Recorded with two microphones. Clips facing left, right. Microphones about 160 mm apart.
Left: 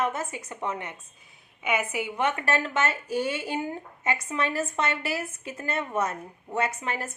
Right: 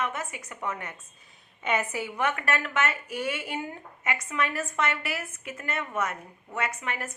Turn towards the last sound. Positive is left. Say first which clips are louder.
# left 3 dB
turn(degrees=30)  # may be behind; listen again after turning